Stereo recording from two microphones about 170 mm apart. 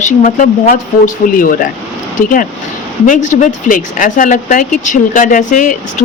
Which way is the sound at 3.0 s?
45° left (ahead or behind).